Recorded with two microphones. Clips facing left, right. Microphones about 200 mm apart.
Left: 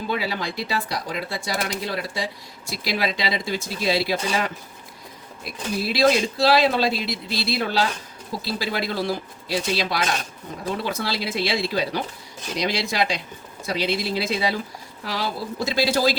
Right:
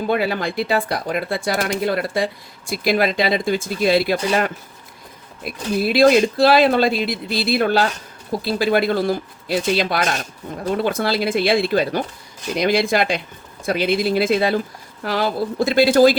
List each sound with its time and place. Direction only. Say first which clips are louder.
0.1 s speech: right 6 dB; 55° right (ahead or behind)